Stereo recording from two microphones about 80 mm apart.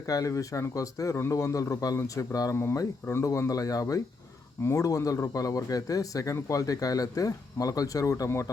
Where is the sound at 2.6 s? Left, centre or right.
Left.